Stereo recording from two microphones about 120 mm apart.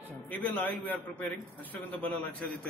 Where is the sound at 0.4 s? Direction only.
15° left (ahead or behind).